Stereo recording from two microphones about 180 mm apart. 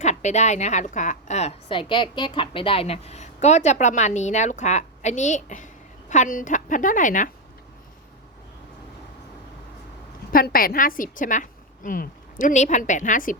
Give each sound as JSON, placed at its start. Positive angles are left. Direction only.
{"t": 0.0, "sound": "a woman's voice", "side_deg": 40}
{"t": 10.3, "sound": "a woman's voice", "side_deg": 55}